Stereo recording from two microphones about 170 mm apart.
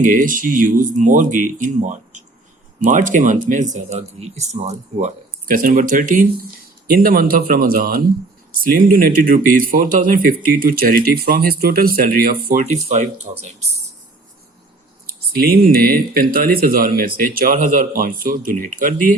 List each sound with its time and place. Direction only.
0.0 s speech: 50° right (ahead or behind)
12.9 s speech: 40° right (ahead or behind)
15.0 s speech: 60° right (ahead or behind)